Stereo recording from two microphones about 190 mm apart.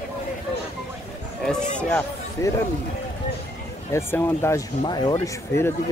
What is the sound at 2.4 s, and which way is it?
Speech, 15° left (ahead or behind).